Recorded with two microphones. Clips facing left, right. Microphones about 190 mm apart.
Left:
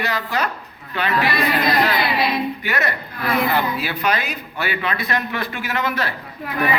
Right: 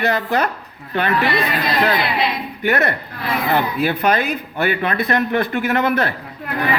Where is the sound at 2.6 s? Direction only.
55° right (ahead or behind).